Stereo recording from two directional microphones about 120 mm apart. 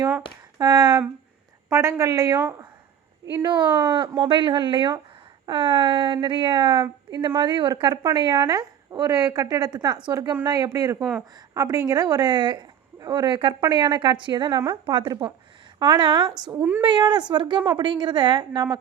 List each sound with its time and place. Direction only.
0.6 s a woman's voice: 35° right (ahead or behind)
2.3 s a woman's voice: 15° right (ahead or behind)
3.3 s a woman's voice: 40° right (ahead or behind)
16.6 s a woman's voice: 20° right (ahead or behind)
16.8 s a woman's voice: 35° right (ahead or behind)